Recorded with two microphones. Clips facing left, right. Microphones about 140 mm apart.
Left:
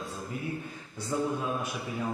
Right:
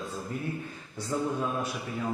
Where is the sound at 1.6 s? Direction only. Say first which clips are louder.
Right 1 dB; 15° left (ahead or behind).